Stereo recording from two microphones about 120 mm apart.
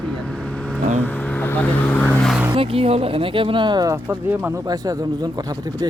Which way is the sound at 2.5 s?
50° right (ahead or behind).